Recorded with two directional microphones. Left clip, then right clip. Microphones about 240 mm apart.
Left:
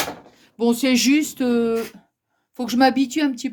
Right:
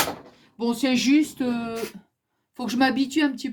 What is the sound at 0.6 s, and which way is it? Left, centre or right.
Speech, left.